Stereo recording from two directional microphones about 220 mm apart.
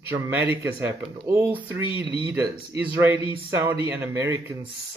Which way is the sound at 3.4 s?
10° right (ahead or behind).